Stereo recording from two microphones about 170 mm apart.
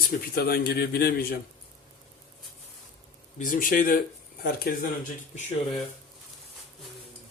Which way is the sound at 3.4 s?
50° left (ahead or behind).